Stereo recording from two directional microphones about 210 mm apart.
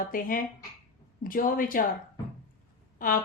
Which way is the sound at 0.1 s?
40° left (ahead or behind).